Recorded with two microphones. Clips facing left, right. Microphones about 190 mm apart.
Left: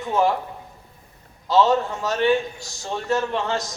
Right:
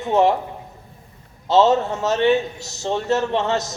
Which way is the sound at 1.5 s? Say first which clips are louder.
Right 3 dB; 25° right (ahead or behind).